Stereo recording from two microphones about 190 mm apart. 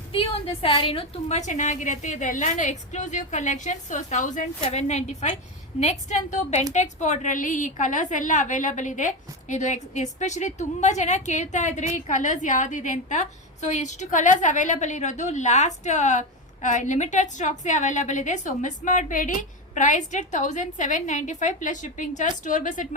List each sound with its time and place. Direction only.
0.1 s a woman's voice: 30° left (ahead or behind)